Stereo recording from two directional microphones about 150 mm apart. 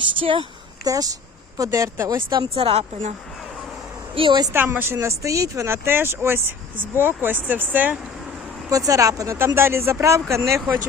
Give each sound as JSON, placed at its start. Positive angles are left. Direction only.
{"t": 0.2, "sound": "speech", "side_deg": -35}
{"t": 0.9, "sound": "speech", "side_deg": -25}
{"t": 4.1, "sound": "speech", "side_deg": -35}
{"t": 4.5, "sound": "speech", "side_deg": -15}
{"t": 8.7, "sound": "speech", "side_deg": -20}